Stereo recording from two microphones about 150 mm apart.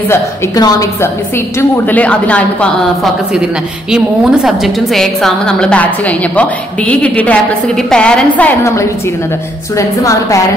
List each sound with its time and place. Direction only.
0.6 s a woman's voice: 20° left (ahead or behind)
1.6 s speech: 10° left (ahead or behind)
3.9 s a woman's voice: 5° right (ahead or behind); by 10.4 s 20° left (ahead or behind)